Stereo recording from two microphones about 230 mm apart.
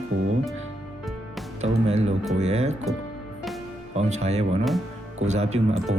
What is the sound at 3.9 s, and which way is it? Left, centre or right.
Speech, right.